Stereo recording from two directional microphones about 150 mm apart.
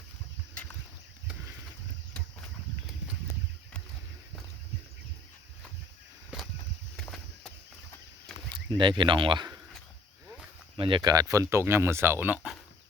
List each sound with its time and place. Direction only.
6.9 s a sound: centre (ahead or behind)
8.8 s speech: 30° right (ahead or behind)
10.8 s speech: 35° right (ahead or behind); by 12.4 s 15° right (ahead or behind)